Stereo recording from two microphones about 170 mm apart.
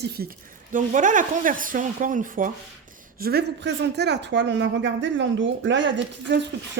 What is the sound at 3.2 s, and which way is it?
Speech, 70° right (ahead or behind).